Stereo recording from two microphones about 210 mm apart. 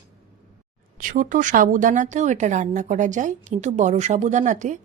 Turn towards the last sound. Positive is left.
turn(degrees=-35)  # may be behind; listen again after turning